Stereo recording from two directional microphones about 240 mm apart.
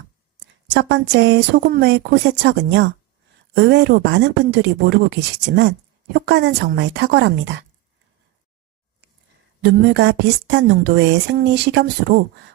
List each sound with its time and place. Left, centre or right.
0.3 s speech: right
9.6 s speech: right